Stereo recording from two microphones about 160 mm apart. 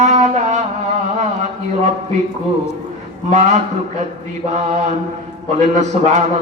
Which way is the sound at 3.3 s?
45° right (ahead or behind).